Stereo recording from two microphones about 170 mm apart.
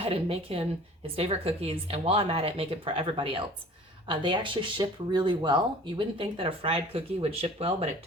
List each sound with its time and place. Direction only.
0.0 s speech: 35° right (ahead or behind)